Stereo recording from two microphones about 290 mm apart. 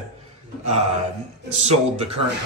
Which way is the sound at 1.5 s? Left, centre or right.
Right.